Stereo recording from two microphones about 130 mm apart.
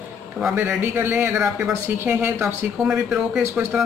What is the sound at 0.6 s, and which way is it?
Speech, 15° right (ahead or behind).